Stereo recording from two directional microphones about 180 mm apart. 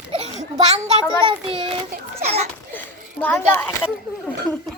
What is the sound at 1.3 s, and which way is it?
Speech, 30° right (ahead or behind).